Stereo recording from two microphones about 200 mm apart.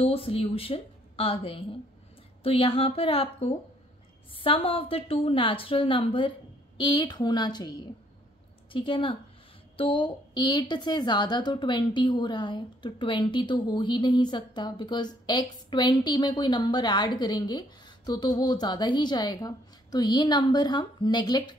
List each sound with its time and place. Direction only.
0.0 s a woman's voice: 30° left (ahead or behind)